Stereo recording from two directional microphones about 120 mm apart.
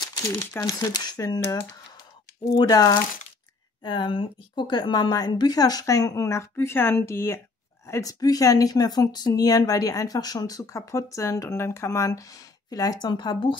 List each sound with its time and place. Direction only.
0.5 s speech: 20° left (ahead or behind)
0.7 s speech: 35° left (ahead or behind)
3.8 s speech: 45° left (ahead or behind)